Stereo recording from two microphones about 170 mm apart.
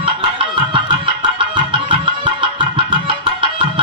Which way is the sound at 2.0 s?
30° right (ahead or behind).